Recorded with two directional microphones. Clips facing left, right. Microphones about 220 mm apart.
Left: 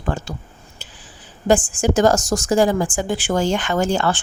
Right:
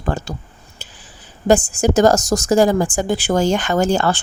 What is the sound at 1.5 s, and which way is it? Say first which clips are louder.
A woman's voice: right 2 dB; 40° right (ahead or behind).